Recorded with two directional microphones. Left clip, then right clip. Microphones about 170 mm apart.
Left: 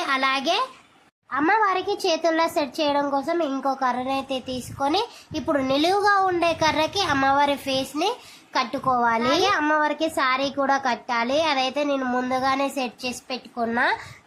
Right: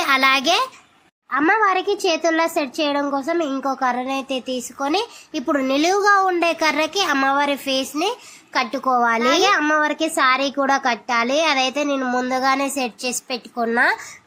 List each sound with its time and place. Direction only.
0.0 s a child's voice: 20° right (ahead or behind)